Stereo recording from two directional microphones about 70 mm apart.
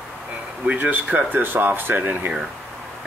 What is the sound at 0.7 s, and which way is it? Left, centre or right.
Speech, right.